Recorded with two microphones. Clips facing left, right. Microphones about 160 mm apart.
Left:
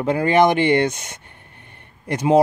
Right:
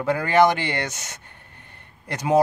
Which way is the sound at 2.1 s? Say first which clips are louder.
Left 6 dB; 15° left (ahead or behind).